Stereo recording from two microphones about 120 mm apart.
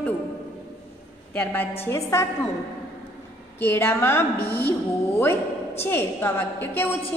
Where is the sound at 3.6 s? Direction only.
20° left (ahead or behind).